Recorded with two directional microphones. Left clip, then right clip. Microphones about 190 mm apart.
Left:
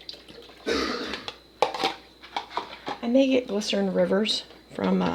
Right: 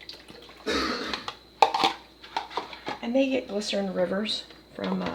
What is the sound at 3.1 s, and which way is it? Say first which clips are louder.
Speech: left 4 dB; 45° left (ahead or behind).